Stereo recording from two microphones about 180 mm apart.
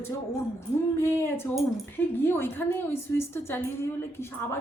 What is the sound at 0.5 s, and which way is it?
A woman's voice, 15° left (ahead or behind).